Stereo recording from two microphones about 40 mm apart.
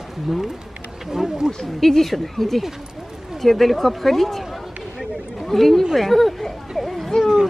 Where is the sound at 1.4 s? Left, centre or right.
Centre.